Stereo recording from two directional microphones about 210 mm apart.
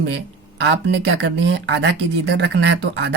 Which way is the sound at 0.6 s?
55° right (ahead or behind).